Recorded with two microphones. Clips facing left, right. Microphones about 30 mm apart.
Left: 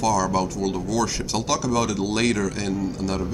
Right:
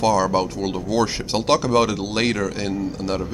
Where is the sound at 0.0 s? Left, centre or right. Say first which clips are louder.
Right 3 dB; right.